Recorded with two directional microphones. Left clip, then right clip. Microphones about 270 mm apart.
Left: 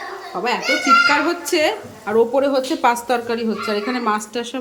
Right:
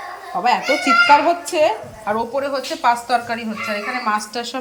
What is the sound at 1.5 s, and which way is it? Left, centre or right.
Speech, centre.